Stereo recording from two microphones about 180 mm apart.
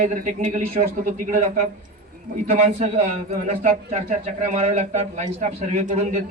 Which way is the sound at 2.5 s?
40° right (ahead or behind).